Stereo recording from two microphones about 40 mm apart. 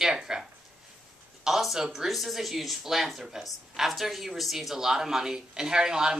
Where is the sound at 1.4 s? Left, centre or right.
Centre.